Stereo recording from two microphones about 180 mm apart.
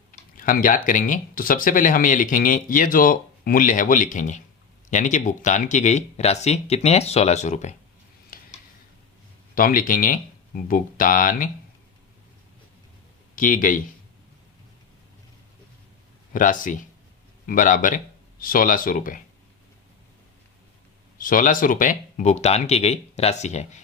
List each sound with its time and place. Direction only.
0.1 s speech: 50° left (ahead or behind)
8.3 s a sound: 50° left (ahead or behind)
9.6 s speech: 50° left (ahead or behind)
13.3 s speech: 50° left (ahead or behind)
16.3 s speech: 50° left (ahead or behind)
21.2 s speech: 50° left (ahead or behind)